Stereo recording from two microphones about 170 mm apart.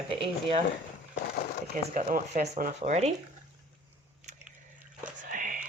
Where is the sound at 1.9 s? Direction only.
50° right (ahead or behind).